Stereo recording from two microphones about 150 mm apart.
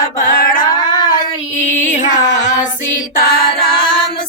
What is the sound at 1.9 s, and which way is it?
Music, 60° left (ahead or behind).